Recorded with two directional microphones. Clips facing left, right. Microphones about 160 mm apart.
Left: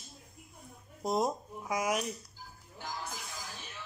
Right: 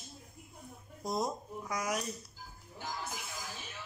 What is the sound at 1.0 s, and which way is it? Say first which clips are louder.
A woman's voice: left 4 dB; 10° left (ahead or behind).